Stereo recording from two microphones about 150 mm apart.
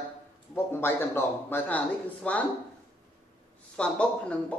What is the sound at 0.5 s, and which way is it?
Speech, 15° left (ahead or behind).